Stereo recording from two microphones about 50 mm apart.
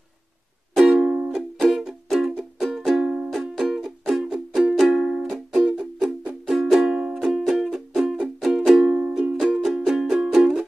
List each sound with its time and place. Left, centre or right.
0.9 s music: centre
3.1 s music: centre